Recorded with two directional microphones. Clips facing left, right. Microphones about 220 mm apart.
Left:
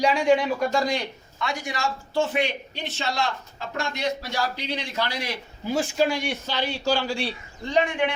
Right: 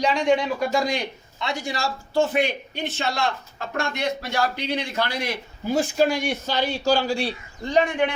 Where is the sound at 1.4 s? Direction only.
25° right (ahead or behind).